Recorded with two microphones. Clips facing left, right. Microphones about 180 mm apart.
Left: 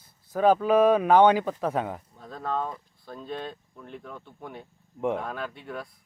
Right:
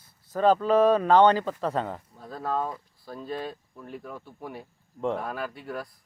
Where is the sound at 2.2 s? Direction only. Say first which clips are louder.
Right 1 dB; 5° right (ahead or behind).